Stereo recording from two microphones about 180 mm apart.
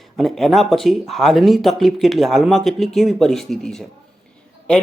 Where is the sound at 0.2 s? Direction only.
Centre (ahead or behind).